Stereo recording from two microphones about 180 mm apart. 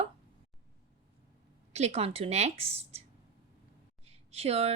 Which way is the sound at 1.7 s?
35° right (ahead or behind).